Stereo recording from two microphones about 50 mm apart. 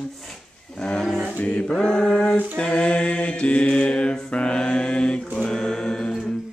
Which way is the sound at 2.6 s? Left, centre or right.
Left.